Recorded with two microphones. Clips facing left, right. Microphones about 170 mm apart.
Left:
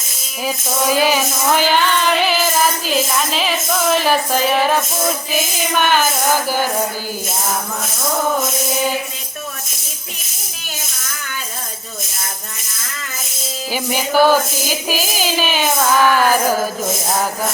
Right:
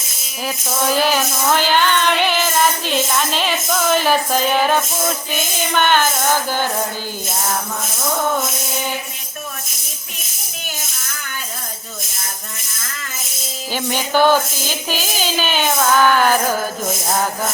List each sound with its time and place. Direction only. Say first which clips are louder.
0.4 s child singing: left 2 dB; 5° left (ahead or behind)
5.3 s speech: left 1 dB; 5° left (ahead or behind)
13.7 s speech: left 2 dB; 5° left (ahead or behind)